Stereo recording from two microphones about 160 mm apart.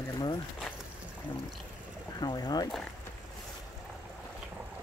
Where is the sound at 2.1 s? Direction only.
25° left (ahead or behind).